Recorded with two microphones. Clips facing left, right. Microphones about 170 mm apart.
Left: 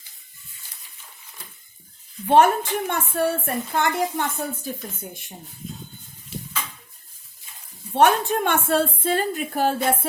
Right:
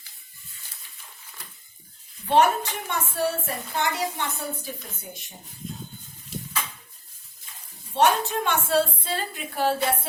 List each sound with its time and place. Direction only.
2.3 s a woman's voice: 50° left (ahead or behind)
7.9 s a woman's voice: 55° left (ahead or behind)